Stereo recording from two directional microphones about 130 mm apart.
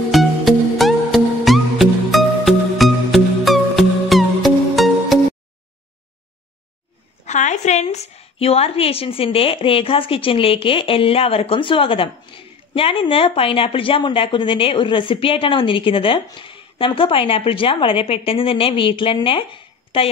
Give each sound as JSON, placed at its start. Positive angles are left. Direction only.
{"t": 0.1, "sound": "music", "side_deg": 0}
{"t": 7.2, "sound": "a woman's voice", "side_deg": 65}